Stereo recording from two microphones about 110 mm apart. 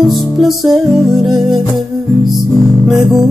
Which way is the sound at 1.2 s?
40° right (ahead or behind).